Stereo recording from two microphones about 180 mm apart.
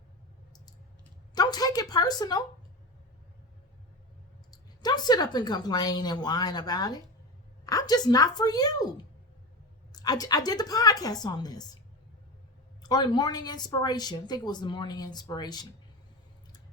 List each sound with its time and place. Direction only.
1.4 s a woman's voice: 20° left (ahead or behind)
4.5 s a woman's voice: 20° left (ahead or behind)
12.8 s a woman's voice: 20° left (ahead or behind)